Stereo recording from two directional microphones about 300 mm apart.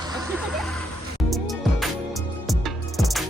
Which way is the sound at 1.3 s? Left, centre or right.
Centre.